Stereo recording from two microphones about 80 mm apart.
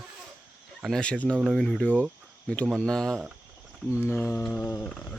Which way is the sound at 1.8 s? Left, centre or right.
Centre.